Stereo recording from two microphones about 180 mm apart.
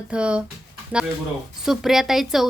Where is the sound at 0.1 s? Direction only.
5° right (ahead or behind).